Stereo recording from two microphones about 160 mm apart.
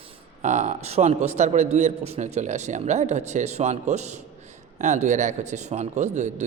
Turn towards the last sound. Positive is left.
turn(degrees=-45)  # may be behind; listen again after turning